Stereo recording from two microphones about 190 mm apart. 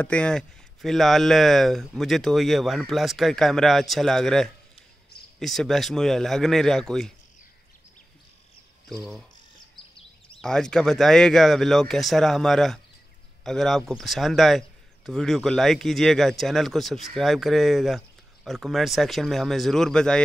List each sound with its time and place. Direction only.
0.0 s speech: 5° left (ahead or behind)
8.9 s speech: centre (ahead or behind)
9.9 s a sound: 30° left (ahead or behind)
10.4 s speech: 5° left (ahead or behind)